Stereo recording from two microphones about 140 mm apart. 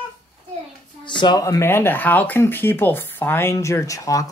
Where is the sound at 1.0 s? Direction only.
35° left (ahead or behind).